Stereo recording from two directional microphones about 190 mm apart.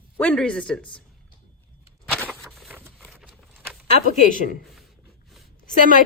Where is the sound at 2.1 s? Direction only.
5° left (ahead or behind).